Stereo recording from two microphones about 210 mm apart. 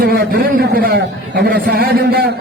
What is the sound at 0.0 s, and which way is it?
A man's voice, 50° right (ahead or behind).